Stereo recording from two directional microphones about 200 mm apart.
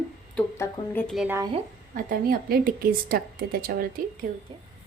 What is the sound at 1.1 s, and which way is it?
Speech, 10° right (ahead or behind).